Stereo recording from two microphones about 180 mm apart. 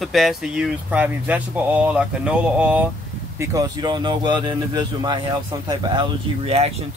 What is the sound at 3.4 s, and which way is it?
Speech, 20° right (ahead or behind).